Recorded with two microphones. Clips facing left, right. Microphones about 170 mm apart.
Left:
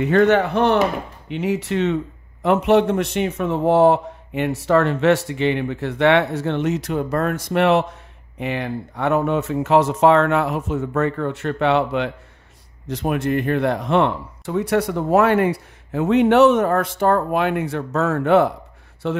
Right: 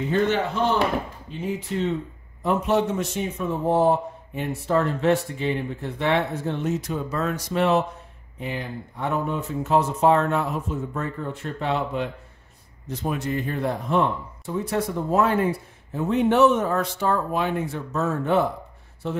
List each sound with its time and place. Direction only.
0.0 s speech: 70° left (ahead or behind)
1.3 s speech: 80° left